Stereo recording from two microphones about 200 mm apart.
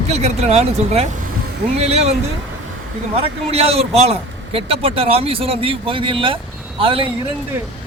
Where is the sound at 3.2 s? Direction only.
30° right (ahead or behind).